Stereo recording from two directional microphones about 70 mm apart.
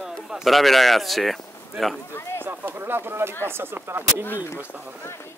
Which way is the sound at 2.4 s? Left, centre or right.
Right.